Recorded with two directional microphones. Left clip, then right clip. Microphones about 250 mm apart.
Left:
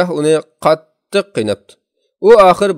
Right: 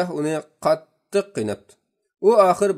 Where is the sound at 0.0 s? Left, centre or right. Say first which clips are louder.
Left 11 dB; left.